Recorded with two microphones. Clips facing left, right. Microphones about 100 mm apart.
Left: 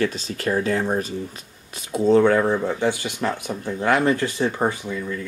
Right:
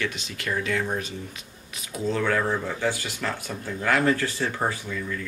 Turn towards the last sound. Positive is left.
turn(degrees=25)  # may be behind; listen again after turning